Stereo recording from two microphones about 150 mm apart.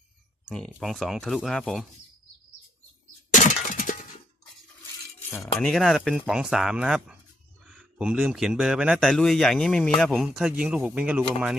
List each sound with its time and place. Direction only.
0.5 s speech: centre (ahead or behind)
3.4 s a sound: 60° left (ahead or behind)
5.5 s a man's voice: centre (ahead or behind)